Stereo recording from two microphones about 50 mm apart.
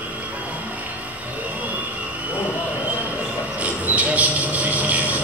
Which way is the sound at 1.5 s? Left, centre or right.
Right.